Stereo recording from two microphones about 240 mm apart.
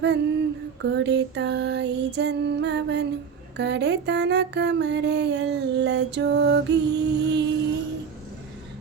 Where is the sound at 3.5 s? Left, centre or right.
Right.